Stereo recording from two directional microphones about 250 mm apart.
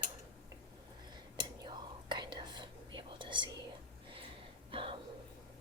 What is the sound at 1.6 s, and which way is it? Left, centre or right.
Whispering, centre.